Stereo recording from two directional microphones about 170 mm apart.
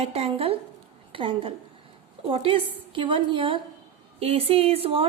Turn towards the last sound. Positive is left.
turn(degrees=-35)  # may be behind; listen again after turning